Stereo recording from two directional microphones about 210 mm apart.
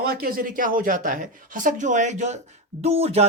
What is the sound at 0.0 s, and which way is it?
Speech, 45° right (ahead or behind).